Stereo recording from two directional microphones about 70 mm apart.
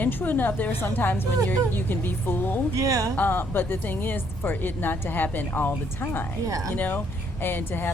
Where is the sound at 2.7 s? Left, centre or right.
Right.